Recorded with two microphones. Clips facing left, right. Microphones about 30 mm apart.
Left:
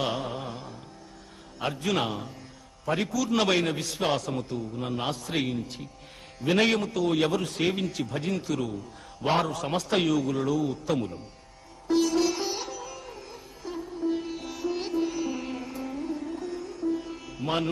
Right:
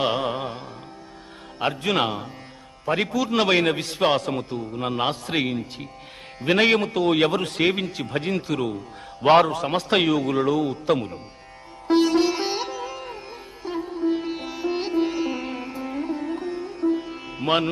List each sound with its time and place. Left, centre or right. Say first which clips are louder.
0.2 s music: right 7 dB; right
0.4 s music: right 5 dB; right
1.5 s speech: right 5 dB; right
3.0 s speech: right 5 dB; right
3.2 s speech: right 4 dB; right
3.7 s a man's voice: right 6 dB; right
7.6 s a man's voice: right 5 dB; right
11.9 s music: right 5 dB; right
14.1 s music: right 5 dB; right
16.0 s music: right 7 dB; right